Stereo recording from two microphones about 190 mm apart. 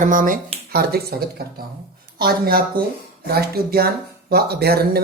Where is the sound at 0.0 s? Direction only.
45° right (ahead or behind).